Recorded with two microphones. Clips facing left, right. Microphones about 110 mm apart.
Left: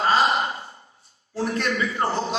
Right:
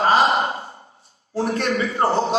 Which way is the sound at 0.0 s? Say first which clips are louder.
Right 3 dB; 40° right (ahead or behind).